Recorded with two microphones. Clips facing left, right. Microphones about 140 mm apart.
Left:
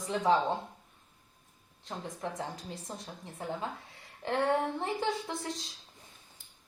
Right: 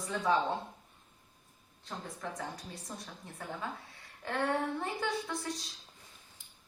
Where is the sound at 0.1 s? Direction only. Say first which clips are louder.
Left 4 dB; 25° left (ahead or behind).